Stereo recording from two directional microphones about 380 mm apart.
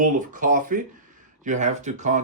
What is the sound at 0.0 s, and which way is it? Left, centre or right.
Speech, right.